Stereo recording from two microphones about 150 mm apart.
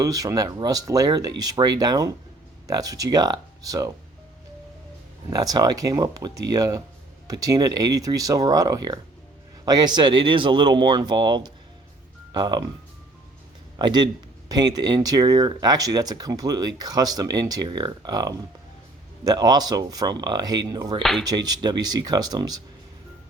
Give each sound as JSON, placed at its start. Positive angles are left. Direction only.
{"t": 0.0, "sound": "speech", "side_deg": -20}
{"t": 5.3, "sound": "speech", "side_deg": -25}
{"t": 13.7, "sound": "speech", "side_deg": -30}
{"t": 21.0, "sound": "speech", "side_deg": 0}
{"t": 21.2, "sound": "speech", "side_deg": -25}